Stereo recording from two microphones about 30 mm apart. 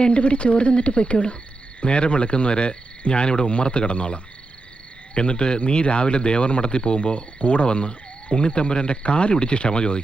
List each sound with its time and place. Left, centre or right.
0.0 s speech: left